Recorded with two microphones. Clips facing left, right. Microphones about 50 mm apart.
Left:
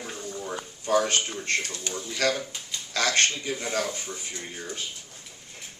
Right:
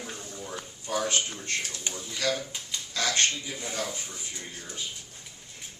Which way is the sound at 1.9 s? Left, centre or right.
Centre.